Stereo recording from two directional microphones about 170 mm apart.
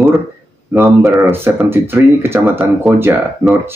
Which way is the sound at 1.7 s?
15° right (ahead or behind).